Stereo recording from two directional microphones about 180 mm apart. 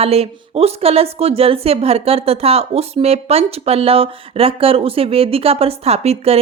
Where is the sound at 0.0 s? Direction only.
35° right (ahead or behind).